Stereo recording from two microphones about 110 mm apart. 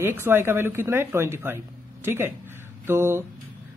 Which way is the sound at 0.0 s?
20° right (ahead or behind).